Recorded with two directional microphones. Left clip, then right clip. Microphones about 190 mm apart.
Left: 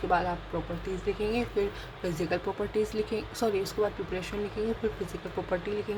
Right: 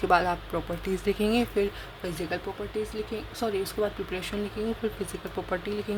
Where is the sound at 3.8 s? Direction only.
10° right (ahead or behind).